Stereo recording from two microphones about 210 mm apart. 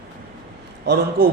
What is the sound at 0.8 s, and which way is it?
Speech, 50° right (ahead or behind).